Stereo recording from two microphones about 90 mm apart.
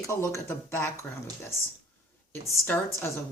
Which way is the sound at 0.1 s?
35° left (ahead or behind).